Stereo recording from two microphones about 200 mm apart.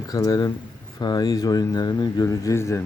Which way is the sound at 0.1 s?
20° left (ahead or behind).